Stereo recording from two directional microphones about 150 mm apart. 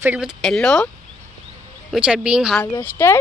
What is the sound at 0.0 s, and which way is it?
Speech, 5° right (ahead or behind).